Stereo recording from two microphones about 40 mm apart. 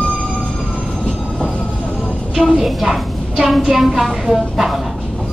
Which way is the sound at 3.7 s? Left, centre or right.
Centre.